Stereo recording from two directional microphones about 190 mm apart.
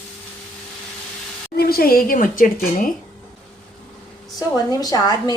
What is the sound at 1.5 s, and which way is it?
A woman's voice, 50° left (ahead or behind).